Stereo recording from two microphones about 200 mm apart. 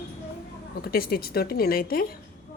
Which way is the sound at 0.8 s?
50° left (ahead or behind).